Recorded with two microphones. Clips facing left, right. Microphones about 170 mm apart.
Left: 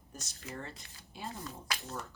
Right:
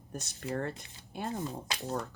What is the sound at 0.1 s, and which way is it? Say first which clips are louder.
Speech: right 9 dB; 60° right (ahead or behind).